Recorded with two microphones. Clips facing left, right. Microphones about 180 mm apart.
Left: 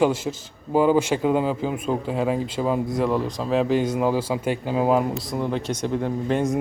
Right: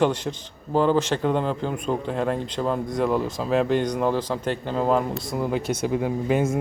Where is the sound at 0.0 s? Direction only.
5° left (ahead or behind).